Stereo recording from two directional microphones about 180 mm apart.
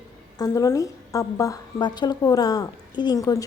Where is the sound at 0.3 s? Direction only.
20° left (ahead or behind).